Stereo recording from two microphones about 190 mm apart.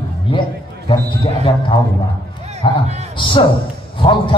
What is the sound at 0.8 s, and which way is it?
A man's voice, 25° left (ahead or behind).